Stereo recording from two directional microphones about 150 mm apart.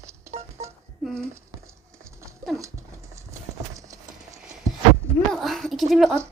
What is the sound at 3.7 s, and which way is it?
Clip-clop, 20° right (ahead or behind).